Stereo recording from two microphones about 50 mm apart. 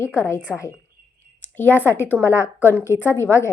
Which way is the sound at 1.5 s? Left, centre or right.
Left.